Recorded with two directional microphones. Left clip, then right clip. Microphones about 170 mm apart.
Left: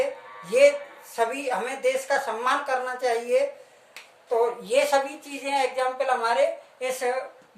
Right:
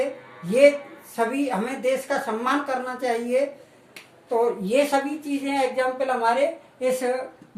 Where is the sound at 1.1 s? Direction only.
15° left (ahead or behind).